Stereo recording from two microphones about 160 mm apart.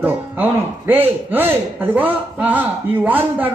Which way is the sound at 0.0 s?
10° right (ahead or behind).